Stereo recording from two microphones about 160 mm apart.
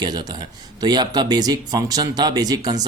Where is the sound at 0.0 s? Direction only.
25° right (ahead or behind).